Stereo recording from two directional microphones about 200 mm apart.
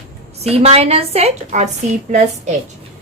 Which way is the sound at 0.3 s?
30° right (ahead or behind).